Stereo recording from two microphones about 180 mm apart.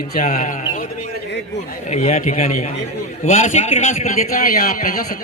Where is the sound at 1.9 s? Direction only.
40° left (ahead or behind).